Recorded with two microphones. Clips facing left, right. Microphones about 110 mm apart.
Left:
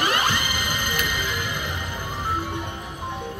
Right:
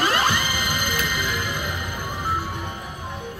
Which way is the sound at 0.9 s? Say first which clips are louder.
Right 1 dB; 15° left (ahead or behind).